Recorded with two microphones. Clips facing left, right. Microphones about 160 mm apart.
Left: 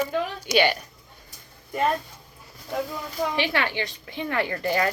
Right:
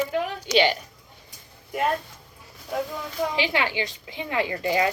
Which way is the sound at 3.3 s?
15° right (ahead or behind).